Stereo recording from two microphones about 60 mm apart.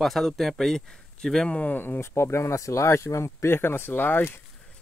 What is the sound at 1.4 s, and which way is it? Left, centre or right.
Speech, left.